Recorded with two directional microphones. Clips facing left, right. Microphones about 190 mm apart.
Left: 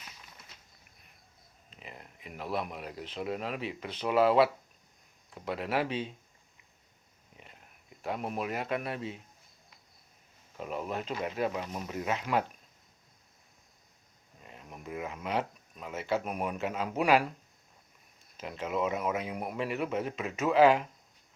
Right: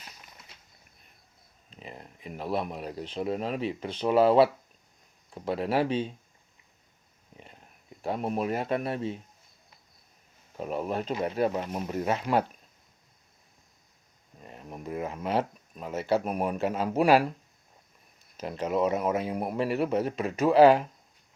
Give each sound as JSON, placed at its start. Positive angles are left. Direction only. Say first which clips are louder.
{"t": 1.7, "sound": "speech", "louder": "right 5 dB", "side_deg": -35}
{"t": 8.0, "sound": "a man's voice", "louder": "right 5 dB", "side_deg": -30}
{"t": 10.6, "sound": "a man's voice", "louder": "right 5 dB", "side_deg": -35}
{"t": 11.9, "sound": "a man's voice", "louder": "right 4 dB", "side_deg": -35}
{"t": 14.4, "sound": "speech", "louder": "right 6 dB", "side_deg": -40}
{"t": 18.3, "sound": "a man's voice", "louder": "right 5 dB", "side_deg": -40}